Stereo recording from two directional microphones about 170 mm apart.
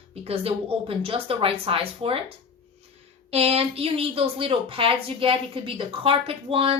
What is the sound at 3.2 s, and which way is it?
Speech, 35° right (ahead or behind).